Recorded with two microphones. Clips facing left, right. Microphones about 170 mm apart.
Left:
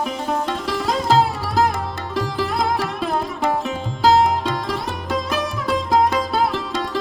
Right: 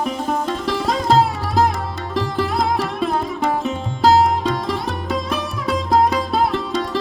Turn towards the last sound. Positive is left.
turn(degrees=0)  # may be behind; listen again after turning